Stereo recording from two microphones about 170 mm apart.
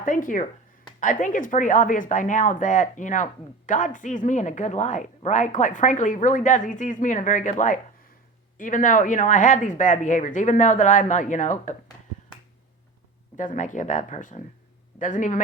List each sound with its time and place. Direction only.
0.0 s speech: 50° left (ahead or behind)
13.3 s speech: 50° left (ahead or behind)